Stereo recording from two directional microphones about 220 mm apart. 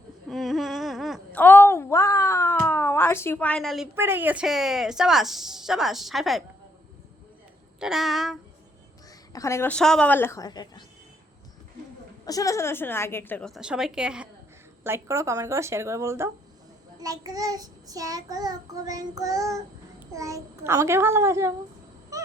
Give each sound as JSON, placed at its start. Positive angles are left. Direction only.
{"t": 0.3, "sound": "a sound", "side_deg": 0}
{"t": 3.9, "sound": "speech", "side_deg": -10}
{"t": 7.8, "sound": "speech", "side_deg": 0}
{"t": 9.3, "sound": "a woman's voice", "side_deg": 15}
{"t": 12.2, "sound": "a woman's voice", "side_deg": 15}
{"t": 14.8, "sound": "child singing", "side_deg": -10}
{"t": 22.1, "sound": "honk", "side_deg": -15}